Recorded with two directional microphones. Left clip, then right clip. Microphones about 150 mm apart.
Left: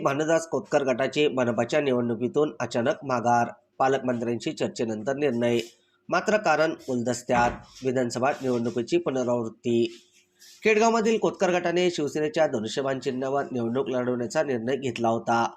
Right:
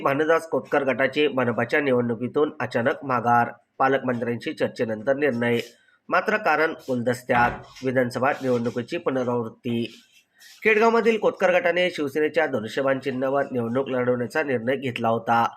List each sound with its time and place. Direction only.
0.0 s speech: 40° left (ahead or behind)